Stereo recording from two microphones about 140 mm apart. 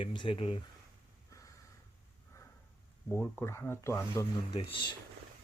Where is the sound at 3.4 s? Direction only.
15° left (ahead or behind).